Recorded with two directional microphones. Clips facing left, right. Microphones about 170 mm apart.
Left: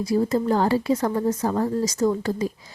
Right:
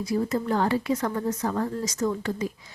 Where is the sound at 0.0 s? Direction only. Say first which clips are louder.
Left 5 dB; 35° left (ahead or behind).